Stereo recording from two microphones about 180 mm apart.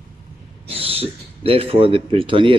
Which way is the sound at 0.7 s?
30° right (ahead or behind).